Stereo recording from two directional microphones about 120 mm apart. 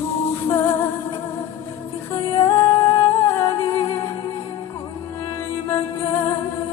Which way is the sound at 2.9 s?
45° left (ahead or behind).